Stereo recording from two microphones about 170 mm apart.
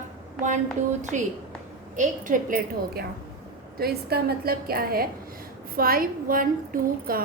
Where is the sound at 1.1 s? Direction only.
45° right (ahead or behind).